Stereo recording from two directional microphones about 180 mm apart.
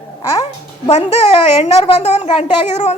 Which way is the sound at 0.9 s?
35° left (ahead or behind).